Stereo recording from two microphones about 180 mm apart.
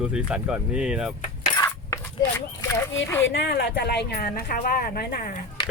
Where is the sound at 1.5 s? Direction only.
15° left (ahead or behind).